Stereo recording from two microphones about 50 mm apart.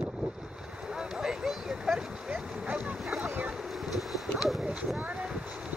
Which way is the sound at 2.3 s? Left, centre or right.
Right.